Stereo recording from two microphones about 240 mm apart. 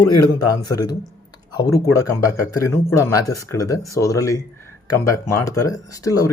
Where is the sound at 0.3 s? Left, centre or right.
Centre.